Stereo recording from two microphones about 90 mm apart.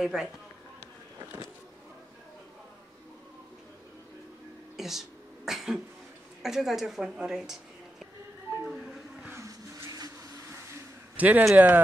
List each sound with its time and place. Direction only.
0.0 s a woman's voice: 5° right (ahead or behind)
4.7 s a sound: 5° right (ahead or behind)
6.4 s a woman's voice: 5° right (ahead or behind)
8.6 s a sound: 5° right (ahead or behind)
9.3 s vehicle: 35° right (ahead or behind)
11.1 s a man's voice: 20° right (ahead or behind)